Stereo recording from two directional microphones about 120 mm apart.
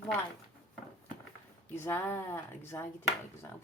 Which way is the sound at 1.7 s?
20° left (ahead or behind).